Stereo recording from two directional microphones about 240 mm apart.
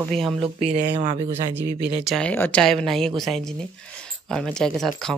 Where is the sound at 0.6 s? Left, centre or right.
Right.